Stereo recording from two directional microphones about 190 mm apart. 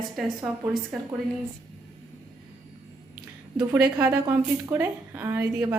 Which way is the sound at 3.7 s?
10° right (ahead or behind).